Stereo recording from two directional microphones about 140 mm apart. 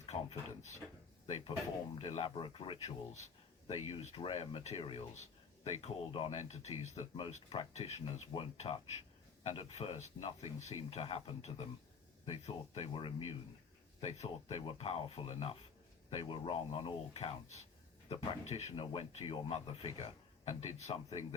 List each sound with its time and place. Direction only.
0.0 s a sound: 50° left (ahead or behind)
1.3 s speech: 40° left (ahead or behind)
14.0 s speech: 50° left (ahead or behind)
18.7 s speech: 35° left (ahead or behind)